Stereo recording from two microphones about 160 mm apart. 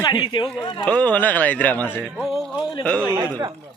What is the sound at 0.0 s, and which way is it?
Speech, 25° left (ahead or behind).